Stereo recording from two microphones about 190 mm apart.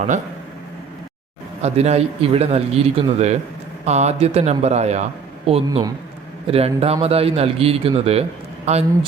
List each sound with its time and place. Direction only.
1.6 s a man's voice: 35° right (ahead or behind)
5.6 s a man's voice: 20° right (ahead or behind)
6.5 s a man's voice: 30° right (ahead or behind)